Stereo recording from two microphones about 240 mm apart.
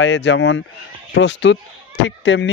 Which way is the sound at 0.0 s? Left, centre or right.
Left.